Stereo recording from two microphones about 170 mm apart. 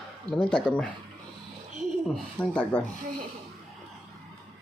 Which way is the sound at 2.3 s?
5° left (ahead or behind).